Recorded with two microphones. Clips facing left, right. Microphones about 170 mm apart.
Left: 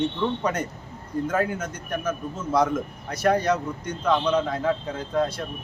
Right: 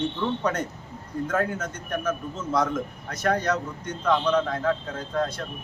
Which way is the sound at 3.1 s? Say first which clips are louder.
Left 3 dB; 10° left (ahead or behind).